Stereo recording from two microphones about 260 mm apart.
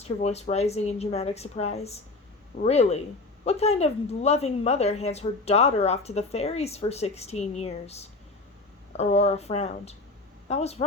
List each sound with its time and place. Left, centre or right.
0.2 s a woman's voice: left